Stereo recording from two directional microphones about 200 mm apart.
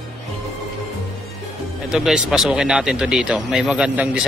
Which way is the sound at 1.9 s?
Centre (ahead or behind).